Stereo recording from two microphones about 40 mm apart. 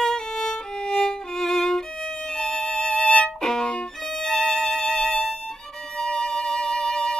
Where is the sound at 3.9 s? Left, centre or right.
Centre.